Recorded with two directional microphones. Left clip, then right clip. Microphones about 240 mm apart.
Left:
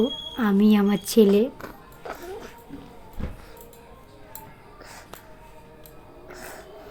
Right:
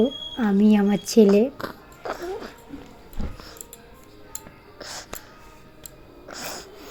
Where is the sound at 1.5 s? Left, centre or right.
Right.